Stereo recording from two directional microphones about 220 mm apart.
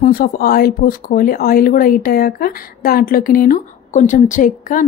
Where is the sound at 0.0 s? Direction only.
40° left (ahead or behind).